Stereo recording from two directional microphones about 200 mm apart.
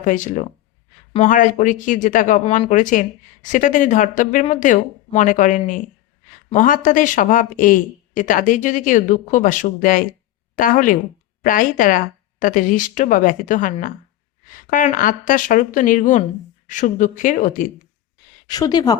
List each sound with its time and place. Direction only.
0.0 s speech: 40° left (ahead or behind)
18.4 s a woman's voice: 20° left (ahead or behind)